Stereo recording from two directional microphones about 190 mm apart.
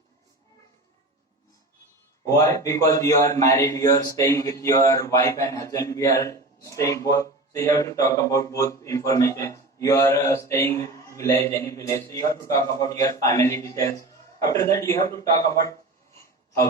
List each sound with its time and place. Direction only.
2.2 s speech: 15° left (ahead or behind)